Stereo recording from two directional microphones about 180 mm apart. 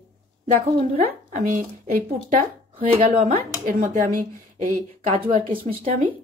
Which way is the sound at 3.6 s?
45° right (ahead or behind).